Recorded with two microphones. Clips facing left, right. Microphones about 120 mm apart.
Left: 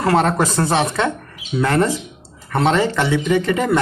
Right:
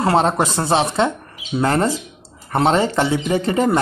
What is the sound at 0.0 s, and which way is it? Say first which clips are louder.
Speech: even; 25° right (ahead or behind).